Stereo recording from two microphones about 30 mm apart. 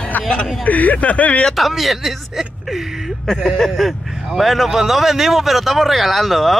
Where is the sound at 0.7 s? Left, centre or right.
Left.